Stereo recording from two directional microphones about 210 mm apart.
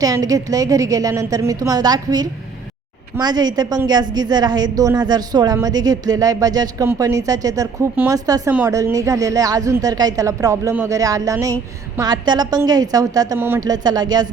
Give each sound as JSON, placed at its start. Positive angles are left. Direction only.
{"t": 0.0, "sound": "a woman's voice", "side_deg": -15}